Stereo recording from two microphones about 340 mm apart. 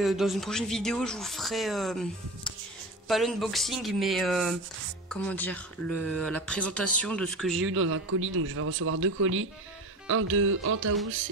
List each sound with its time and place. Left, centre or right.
0.0 s speech: centre
7.6 s a man's voice: right